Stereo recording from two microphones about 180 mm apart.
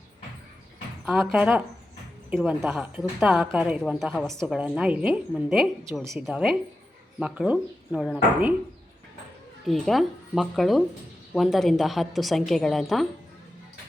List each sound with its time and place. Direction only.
1.0 s a woman's voice: centre (ahead or behind)
9.6 s a woman's voice: centre (ahead or behind)